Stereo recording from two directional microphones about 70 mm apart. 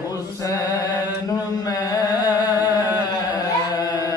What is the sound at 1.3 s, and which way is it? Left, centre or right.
Mantra, left.